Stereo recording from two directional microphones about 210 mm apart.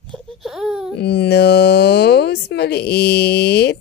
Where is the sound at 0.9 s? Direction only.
55° left (ahead or behind).